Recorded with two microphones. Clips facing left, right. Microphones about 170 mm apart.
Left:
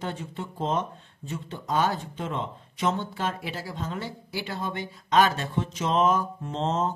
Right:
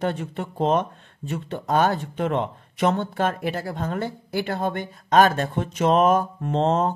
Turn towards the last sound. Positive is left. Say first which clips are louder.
# right 6 dB
turn(degrees=-60)  # may be behind; listen again after turning